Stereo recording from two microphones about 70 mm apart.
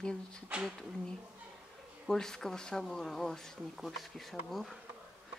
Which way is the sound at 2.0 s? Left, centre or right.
Centre.